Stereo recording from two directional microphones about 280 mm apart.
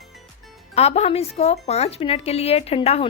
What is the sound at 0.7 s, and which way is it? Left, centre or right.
A woman's voice, left.